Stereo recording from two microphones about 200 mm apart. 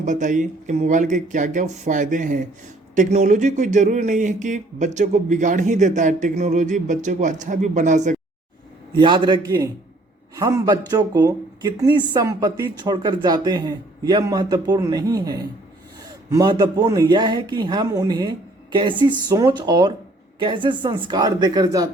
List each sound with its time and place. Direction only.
0.0 s speech: 40° right (ahead or behind)
9.0 s speech: 25° right (ahead or behind)